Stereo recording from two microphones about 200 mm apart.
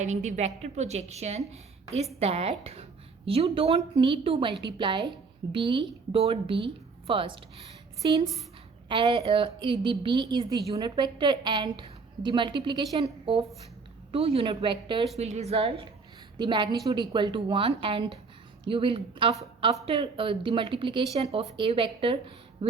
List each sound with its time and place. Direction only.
0.0 s a woman's voice: 35° right (ahead or behind)